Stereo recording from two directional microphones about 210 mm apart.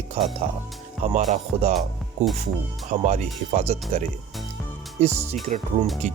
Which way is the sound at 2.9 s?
35° right (ahead or behind).